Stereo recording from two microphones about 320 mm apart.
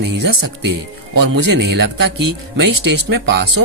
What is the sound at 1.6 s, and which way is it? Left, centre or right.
Speech, right.